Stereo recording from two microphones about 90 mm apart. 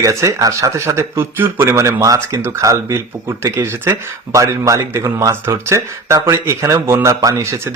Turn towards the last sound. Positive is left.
turn(degrees=-35)  # may be behind; listen again after turning